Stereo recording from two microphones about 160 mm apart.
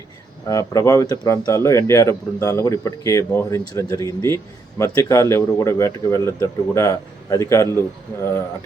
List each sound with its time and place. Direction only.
0.4 s speech: 20° left (ahead or behind)